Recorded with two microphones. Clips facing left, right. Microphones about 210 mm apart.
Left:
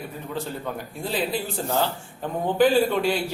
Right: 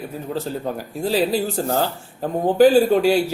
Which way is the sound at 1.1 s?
40° right (ahead or behind).